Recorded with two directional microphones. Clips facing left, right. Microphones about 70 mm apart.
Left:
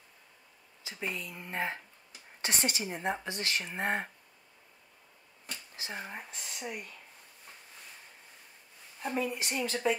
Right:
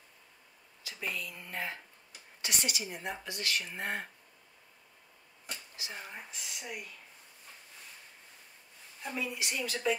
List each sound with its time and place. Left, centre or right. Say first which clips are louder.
0.8 s speech: left 1 dB; left
5.8 s speech: left 6 dB; left
9.0 s speech: left 4 dB; left